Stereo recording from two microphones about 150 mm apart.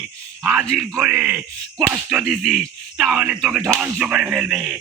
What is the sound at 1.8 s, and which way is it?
Speech, centre (ahead or behind).